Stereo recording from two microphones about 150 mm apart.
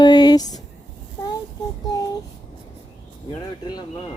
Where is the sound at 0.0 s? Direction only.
30° left (ahead or behind).